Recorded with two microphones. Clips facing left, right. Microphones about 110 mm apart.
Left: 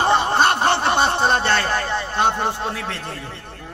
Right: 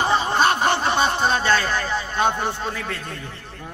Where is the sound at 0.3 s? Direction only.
30° left (ahead or behind).